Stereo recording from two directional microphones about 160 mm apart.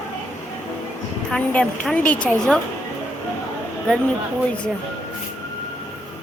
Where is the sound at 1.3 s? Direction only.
5° left (ahead or behind).